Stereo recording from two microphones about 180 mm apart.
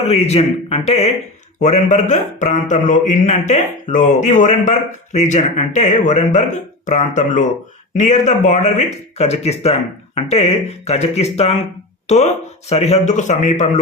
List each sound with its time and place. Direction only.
0.0 s a man's voice: 35° left (ahead or behind)